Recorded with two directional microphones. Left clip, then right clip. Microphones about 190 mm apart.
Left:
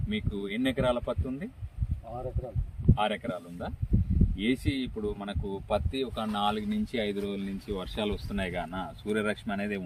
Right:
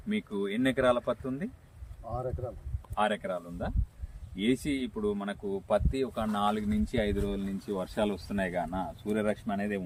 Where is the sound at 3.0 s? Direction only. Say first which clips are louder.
Right 2 dB; 5° right (ahead or behind).